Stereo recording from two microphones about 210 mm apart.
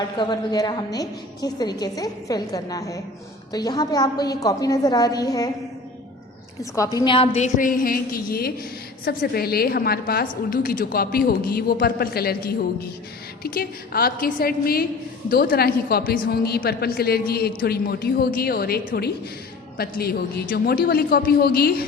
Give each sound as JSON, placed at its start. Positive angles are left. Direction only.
{"t": 0.2, "sound": "a woman's voice", "side_deg": 20}
{"t": 6.6, "sound": "a woman's voice", "side_deg": 15}